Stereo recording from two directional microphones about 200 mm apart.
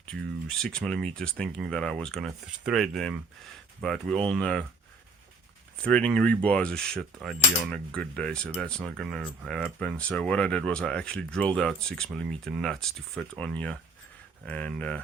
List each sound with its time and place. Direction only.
0.0 s speech: 5° left (ahead or behind)
5.8 s speech: 5° left (ahead or behind)